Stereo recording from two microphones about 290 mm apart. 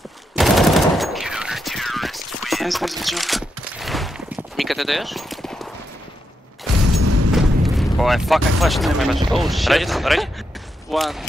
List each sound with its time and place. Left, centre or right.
0.4 s gunshot: centre
6.8 s a sound: right
7.3 s eruption: centre
8.5 s speech: centre